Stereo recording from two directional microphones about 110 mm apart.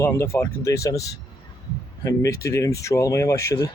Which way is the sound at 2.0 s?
25° left (ahead or behind).